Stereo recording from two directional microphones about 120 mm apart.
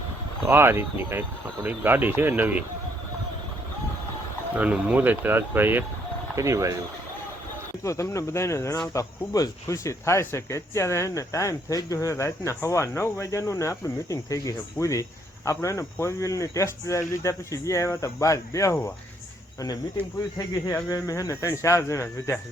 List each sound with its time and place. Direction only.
0.4 s speech: 20° right (ahead or behind)
4.5 s speech: 10° right (ahead or behind)
7.9 s speech: 25° left (ahead or behind)
19.5 s speech: 30° left (ahead or behind)
20.7 s cricket: 15° left (ahead or behind)
20.9 s speech: 30° left (ahead or behind)